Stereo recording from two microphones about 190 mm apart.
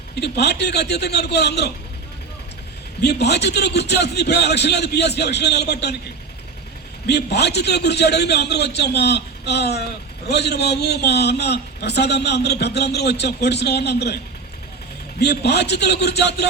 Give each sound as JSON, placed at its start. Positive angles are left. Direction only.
{"t": 0.2, "sound": "a man's voice", "side_deg": 60}
{"t": 3.0, "sound": "a man's voice", "side_deg": 60}
{"t": 7.1, "sound": "a man's voice", "side_deg": 60}
{"t": 15.2, "sound": "a man's voice", "side_deg": 60}